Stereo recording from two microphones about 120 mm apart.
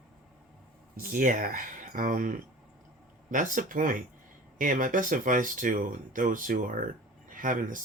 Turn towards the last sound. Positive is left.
turn(degrees=-90)